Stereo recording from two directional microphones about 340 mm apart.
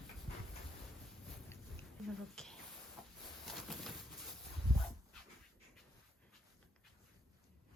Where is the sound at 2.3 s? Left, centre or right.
Centre.